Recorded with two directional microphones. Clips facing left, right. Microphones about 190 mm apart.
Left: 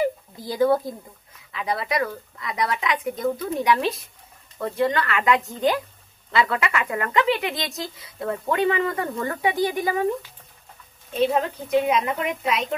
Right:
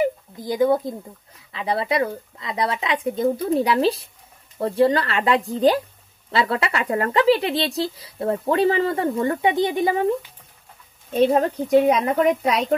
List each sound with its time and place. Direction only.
0.0 s a sound: 20° right (ahead or behind)
1.5 s a woman's voice: 30° right (ahead or behind)
11.1 s speech: 45° right (ahead or behind)